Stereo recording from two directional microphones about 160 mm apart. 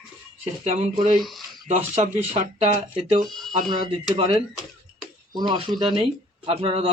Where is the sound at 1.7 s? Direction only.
40° right (ahead or behind).